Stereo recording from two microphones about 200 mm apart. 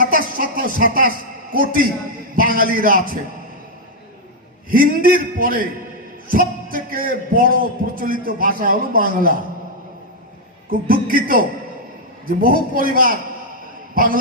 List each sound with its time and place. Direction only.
0.0 s music: 45° right (ahead or behind)
1.5 s a man's voice: 45° right (ahead or behind)
4.7 s a man's voice: 45° right (ahead or behind)
10.7 s a man's voice: 45° right (ahead or behind)